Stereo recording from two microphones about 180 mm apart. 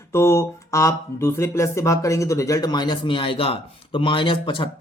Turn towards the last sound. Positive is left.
turn(degrees=30)  # may be behind; listen again after turning